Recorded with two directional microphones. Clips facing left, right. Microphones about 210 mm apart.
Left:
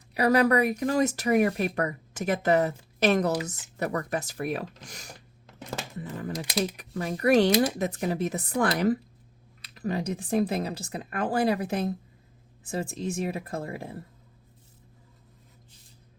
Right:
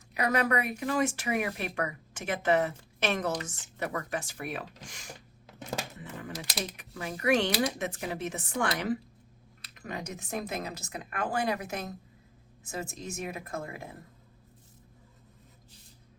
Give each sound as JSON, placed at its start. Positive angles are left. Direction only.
{"t": 0.1, "sound": "speech", "side_deg": 35}
{"t": 6.0, "sound": "typewriter", "side_deg": 35}
{"t": 6.7, "sound": "speech", "side_deg": 35}